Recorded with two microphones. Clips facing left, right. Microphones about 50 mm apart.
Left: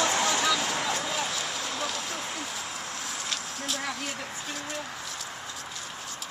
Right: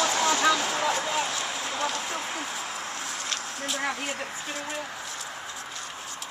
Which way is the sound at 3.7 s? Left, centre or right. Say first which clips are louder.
Right 3 dB; centre.